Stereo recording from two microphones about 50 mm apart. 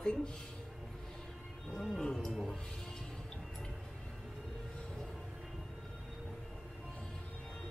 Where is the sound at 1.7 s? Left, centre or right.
Centre.